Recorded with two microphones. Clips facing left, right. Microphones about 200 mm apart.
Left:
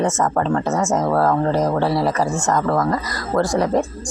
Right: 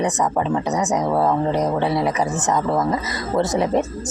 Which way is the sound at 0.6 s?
15° right (ahead or behind).